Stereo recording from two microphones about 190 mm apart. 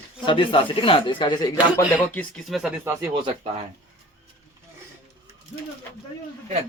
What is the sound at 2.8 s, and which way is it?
Speech, 20° right (ahead or behind).